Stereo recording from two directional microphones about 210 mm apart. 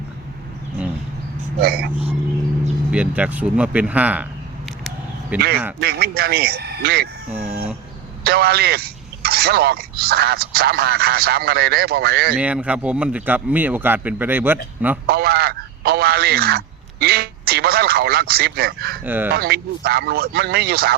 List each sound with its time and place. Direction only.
1.6 s speech: 45° right (ahead or behind)
2.9 s a man's voice: 5° right (ahead or behind)
5.3 s a man's voice: 5° right (ahead or behind)
5.8 s speech: 50° right (ahead or behind)
7.3 s chicken: 5° right (ahead or behind)
8.2 s speech: 50° right (ahead or behind)
12.4 s a man's voice: 5° right (ahead or behind)
15.0 s speech: 50° right (ahead or behind)
19.0 s a man's voice: 10° right (ahead or behind)
19.4 s speech: 50° right (ahead or behind)